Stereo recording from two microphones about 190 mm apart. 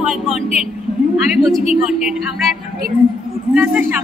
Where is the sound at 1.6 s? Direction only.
35° left (ahead or behind).